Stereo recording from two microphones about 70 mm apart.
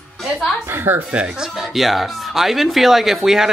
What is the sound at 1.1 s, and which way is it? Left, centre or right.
Speech, centre.